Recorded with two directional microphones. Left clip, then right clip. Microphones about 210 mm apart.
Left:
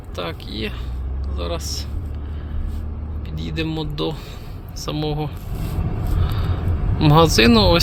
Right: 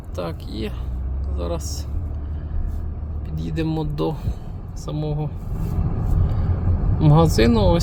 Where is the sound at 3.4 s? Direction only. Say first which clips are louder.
Even; 30° right (ahead or behind).